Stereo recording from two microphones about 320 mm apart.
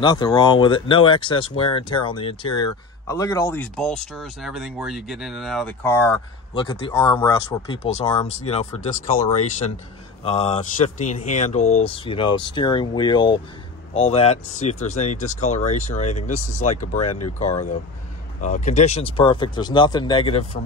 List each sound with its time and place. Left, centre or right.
0.0 s speech: centre